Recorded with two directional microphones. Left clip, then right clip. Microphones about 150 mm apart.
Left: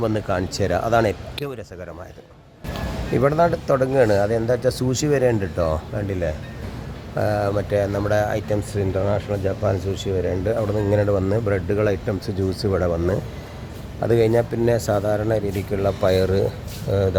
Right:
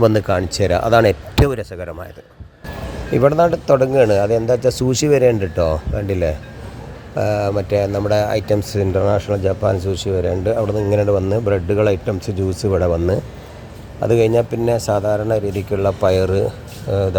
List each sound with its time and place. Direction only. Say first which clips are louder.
0.0 s speech: right 8 dB; 35° right (ahead or behind)
1.4 s speech: right 12 dB; 45° right (ahead or behind)
3.2 s speech: right 5 dB; 20° right (ahead or behind)
6.1 s speech: right 6 dB; 35° right (ahead or behind)
7.2 s speech: right 3 dB; 20° right (ahead or behind)